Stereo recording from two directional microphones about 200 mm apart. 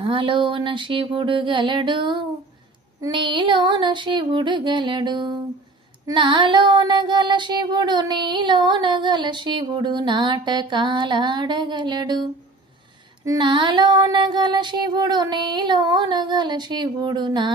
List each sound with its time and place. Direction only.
0.0 s child singing: 25° right (ahead or behind)